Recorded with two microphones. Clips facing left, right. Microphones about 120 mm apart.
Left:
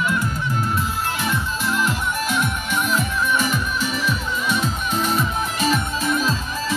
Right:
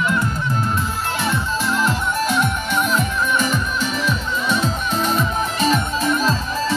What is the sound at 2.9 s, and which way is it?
Music, 10° left (ahead or behind).